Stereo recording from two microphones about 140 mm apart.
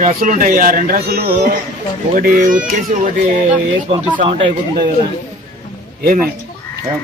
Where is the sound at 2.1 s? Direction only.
75° right (ahead or behind).